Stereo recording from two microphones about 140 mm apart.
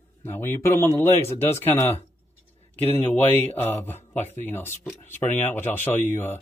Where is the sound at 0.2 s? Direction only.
15° left (ahead or behind).